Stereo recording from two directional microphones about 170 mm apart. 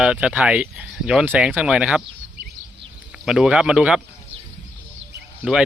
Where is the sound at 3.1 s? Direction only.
5° right (ahead or behind).